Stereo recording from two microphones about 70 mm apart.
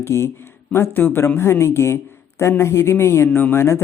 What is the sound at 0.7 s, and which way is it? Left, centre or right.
Speech, left.